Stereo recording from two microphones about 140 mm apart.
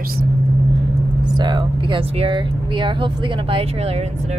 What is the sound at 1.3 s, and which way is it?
Speech, 35° right (ahead or behind).